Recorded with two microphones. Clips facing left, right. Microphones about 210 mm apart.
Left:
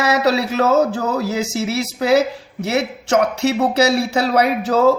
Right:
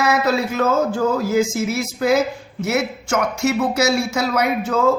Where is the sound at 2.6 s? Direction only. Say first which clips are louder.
Left 1 dB; 65° left (ahead or behind).